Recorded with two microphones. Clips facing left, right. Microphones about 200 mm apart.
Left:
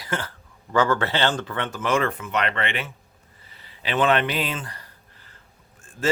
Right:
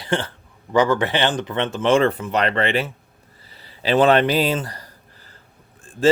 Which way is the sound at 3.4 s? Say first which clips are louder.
Right 8 dB; 35° right (ahead or behind).